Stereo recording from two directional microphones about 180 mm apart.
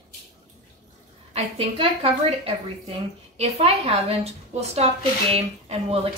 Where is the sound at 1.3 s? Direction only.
35° right (ahead or behind).